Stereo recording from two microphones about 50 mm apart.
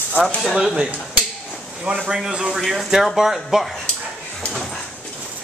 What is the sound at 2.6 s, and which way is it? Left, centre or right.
A man's voice, centre.